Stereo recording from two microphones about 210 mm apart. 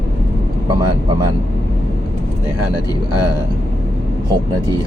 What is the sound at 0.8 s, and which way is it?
Speech, 20° right (ahead or behind).